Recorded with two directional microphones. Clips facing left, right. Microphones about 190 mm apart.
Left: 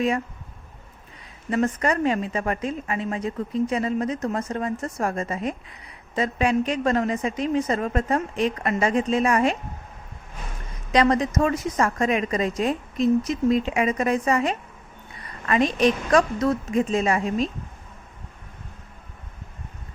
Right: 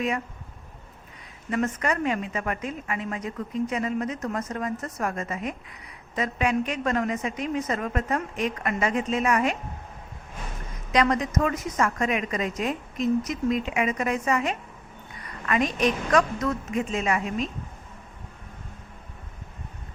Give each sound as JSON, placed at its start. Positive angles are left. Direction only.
{"t": 1.5, "sound": "a woman's voice", "side_deg": 30}
{"t": 10.9, "sound": "a woman's voice", "side_deg": 30}